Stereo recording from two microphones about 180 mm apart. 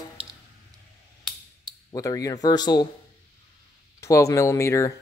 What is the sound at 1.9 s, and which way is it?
Speech, 20° left (ahead or behind).